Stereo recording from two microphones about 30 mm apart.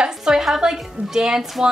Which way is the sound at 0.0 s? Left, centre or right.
Right.